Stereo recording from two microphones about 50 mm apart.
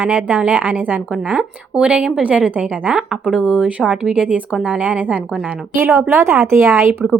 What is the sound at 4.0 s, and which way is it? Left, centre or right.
A woman's voice, right.